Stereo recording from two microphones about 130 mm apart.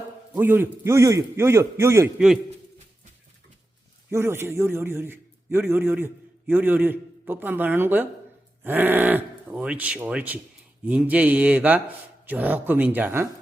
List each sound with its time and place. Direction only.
0.3 s a man's voice: 15° right (ahead or behind)
2.1 s a man's voice: 5° right (ahead or behind)
4.1 s speech: 20° right (ahead or behind)